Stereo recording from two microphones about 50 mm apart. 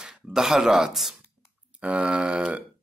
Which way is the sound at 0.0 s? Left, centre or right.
Centre.